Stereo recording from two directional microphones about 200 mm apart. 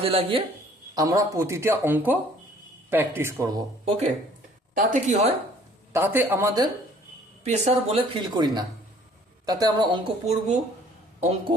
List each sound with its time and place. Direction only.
0.0 s a woman's voice: 30° right (ahead or behind)
0.9 s speech: 15° right (ahead or behind)
3.8 s speech: 30° right (ahead or behind)
5.9 s speech: 10° right (ahead or behind)
7.4 s a woman's voice: 35° right (ahead or behind)
10.2 s speech: 35° right (ahead or behind)